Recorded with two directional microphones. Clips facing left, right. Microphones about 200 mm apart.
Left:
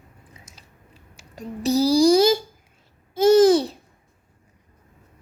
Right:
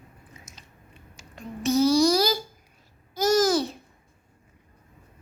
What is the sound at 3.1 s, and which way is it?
Babbling, 30° left (ahead or behind).